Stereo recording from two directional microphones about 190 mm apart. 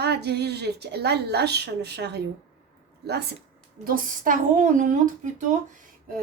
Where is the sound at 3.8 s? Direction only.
45° right (ahead or behind).